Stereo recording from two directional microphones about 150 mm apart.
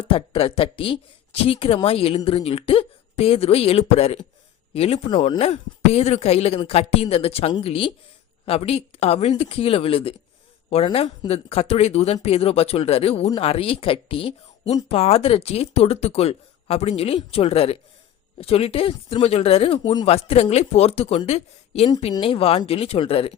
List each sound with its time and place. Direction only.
0.0 s speech: 40° left (ahead or behind)
20.1 s speech: 40° left (ahead or behind)